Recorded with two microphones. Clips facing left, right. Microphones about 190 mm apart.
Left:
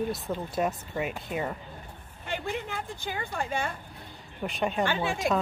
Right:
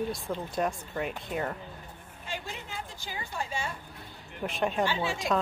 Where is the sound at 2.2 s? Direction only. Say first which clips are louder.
Left 7 dB; 60° left (ahead or behind).